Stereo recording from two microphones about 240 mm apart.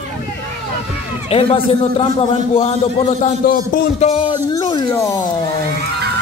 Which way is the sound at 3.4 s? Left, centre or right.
Left.